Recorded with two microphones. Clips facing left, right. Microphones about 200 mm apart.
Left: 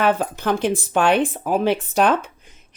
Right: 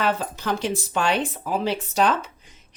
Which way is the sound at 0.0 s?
55° left (ahead or behind).